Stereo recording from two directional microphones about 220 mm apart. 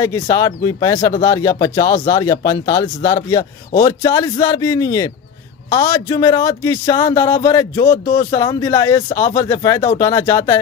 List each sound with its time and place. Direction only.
0.0 s speech: 15° left (ahead or behind)